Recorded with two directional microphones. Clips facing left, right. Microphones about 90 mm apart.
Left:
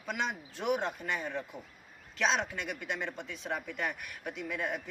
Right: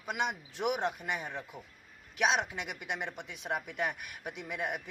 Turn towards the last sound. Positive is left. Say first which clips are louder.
# left 1 dB
turn(degrees=-20)  # may be behind; listen again after turning